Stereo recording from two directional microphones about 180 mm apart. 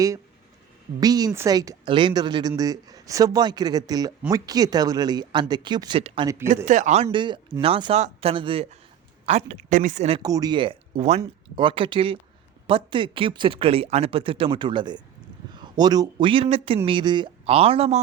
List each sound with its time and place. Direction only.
0.9 s speech: 20° right (ahead or behind)
6.2 s speech: 15° right (ahead or behind)
6.7 s speech: 40° right (ahead or behind)
10.2 s speech: 20° right (ahead or behind)